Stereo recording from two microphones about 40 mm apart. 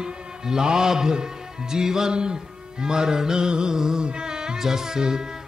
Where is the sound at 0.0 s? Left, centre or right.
Centre.